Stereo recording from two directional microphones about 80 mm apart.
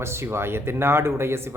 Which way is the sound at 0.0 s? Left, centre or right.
Right.